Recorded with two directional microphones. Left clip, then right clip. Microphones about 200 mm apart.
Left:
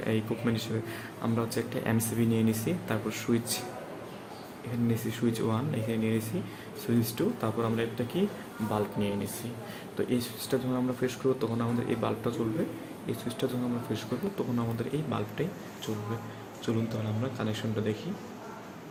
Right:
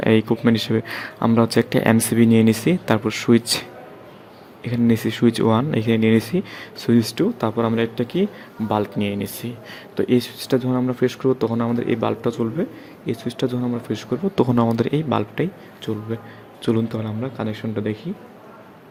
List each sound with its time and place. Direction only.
0.0 s speech: 50° right (ahead or behind)
4.9 s speech: 50° right (ahead or behind)
16.6 s speech: 45° right (ahead or behind)